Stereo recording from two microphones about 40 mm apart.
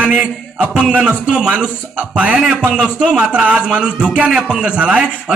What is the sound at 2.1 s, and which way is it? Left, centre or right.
A man's voice, right.